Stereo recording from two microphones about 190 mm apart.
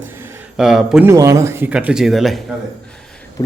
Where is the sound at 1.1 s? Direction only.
15° right (ahead or behind); by 2.4 s centre (ahead or behind).